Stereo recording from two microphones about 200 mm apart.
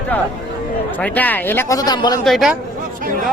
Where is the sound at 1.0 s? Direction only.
10° left (ahead or behind).